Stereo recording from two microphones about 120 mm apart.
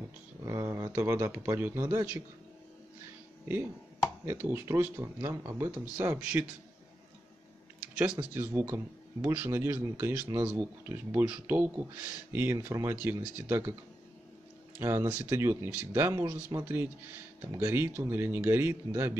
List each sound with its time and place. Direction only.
0.5 s a man's voice: 25° right (ahead or behind)
4.3 s a man's voice: 20° right (ahead or behind)
8.0 s a man's voice: 15° right (ahead or behind)
14.8 s a man's voice: 20° right (ahead or behind)